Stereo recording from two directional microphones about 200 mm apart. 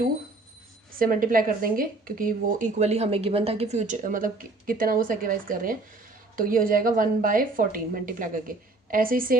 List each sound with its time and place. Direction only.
0.9 s a woman's voice: 45° right (ahead or behind)